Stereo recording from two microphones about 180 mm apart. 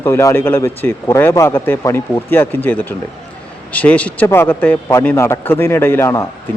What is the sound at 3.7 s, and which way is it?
A man's voice, 10° left (ahead or behind).